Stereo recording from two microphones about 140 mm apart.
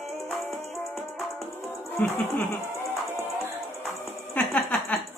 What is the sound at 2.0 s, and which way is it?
Music, 15° left (ahead or behind).